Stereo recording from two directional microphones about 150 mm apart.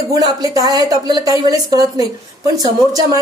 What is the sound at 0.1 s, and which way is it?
A woman's voice, 25° right (ahead or behind).